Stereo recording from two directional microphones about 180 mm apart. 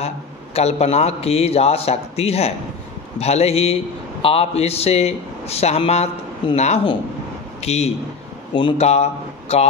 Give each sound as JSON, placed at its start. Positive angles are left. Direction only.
{"t": 0.6, "sound": "a man's voice", "side_deg": 35}